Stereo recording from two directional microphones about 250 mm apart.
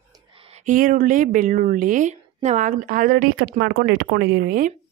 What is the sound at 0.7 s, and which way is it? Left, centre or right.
Speech, right.